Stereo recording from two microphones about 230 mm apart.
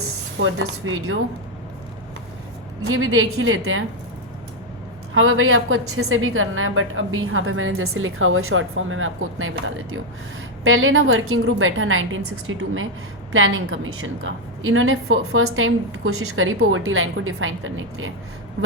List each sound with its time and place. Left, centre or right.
0.3 s a woman's voice: right
2.8 s a woman's voice: right
5.1 s a woman's voice: right